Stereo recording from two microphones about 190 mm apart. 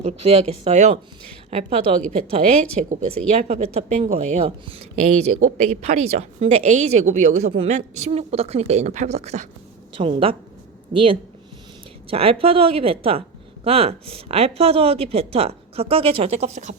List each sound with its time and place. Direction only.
0.0 s a woman's voice: 35° right (ahead or behind)